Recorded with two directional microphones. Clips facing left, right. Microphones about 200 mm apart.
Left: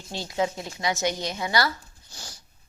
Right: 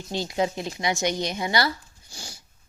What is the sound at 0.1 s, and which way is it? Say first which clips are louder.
Speech: right 2 dB; 20° right (ahead or behind).